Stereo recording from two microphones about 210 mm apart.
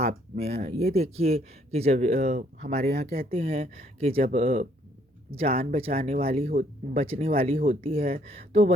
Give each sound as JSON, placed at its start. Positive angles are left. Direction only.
{"t": 0.3, "sound": "speech", "side_deg": -30}
{"t": 3.1, "sound": "speech", "side_deg": -45}
{"t": 3.3, "sound": "speech", "side_deg": -30}
{"t": 7.5, "sound": "speech", "side_deg": -40}
{"t": 7.8, "sound": "speech", "side_deg": -25}